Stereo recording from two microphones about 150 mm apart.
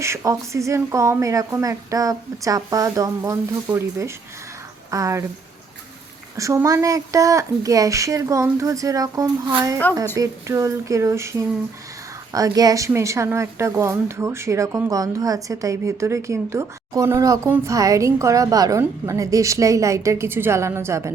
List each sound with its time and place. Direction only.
0.0 s a woman's voice: 20° right (ahead or behind)
6.3 s a woman's voice: 20° right (ahead or behind)